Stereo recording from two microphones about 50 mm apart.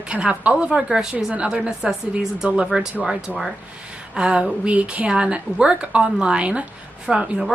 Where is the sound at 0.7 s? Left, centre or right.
Centre.